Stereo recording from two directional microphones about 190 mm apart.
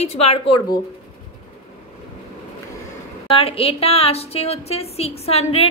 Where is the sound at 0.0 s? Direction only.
30° left (ahead or behind).